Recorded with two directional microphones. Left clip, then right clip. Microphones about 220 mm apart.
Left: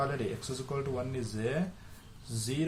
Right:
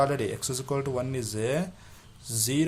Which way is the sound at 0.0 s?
35° right (ahead or behind).